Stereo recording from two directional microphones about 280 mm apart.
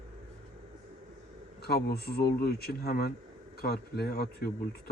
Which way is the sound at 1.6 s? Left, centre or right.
Left.